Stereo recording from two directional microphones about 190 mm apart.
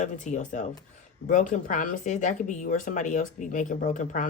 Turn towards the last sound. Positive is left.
turn(degrees=45)  # may be behind; listen again after turning